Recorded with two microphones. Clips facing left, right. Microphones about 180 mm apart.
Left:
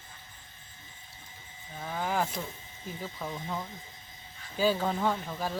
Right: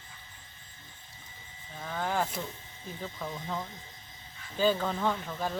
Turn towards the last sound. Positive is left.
turn(degrees=5)  # may be behind; listen again after turning